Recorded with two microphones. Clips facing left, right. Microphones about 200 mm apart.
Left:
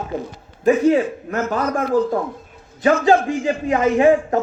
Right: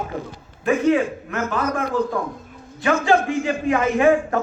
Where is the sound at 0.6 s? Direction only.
35° left (ahead or behind).